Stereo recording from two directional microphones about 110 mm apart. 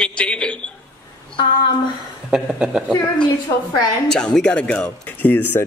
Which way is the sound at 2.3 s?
5° right (ahead or behind).